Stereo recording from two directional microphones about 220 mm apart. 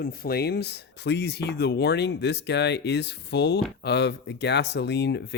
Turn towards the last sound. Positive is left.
turn(degrees=50)  # may be behind; listen again after turning